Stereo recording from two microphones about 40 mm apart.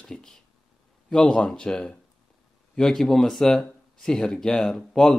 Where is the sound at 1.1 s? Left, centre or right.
Centre.